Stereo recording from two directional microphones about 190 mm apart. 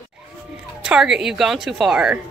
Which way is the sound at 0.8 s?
5° right (ahead or behind).